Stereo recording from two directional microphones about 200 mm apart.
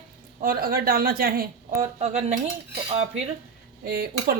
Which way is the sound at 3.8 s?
50° right (ahead or behind).